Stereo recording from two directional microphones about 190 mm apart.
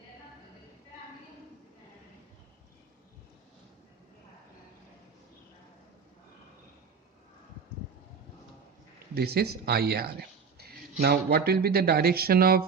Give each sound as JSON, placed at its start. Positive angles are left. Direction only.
{"t": 9.1, "sound": "speech", "side_deg": -55}